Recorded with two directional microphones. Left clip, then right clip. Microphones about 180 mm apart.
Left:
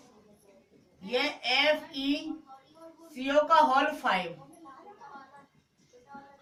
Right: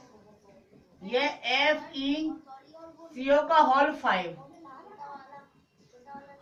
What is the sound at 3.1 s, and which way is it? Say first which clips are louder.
Speech: right 1 dB; 30° left (ahead or behind).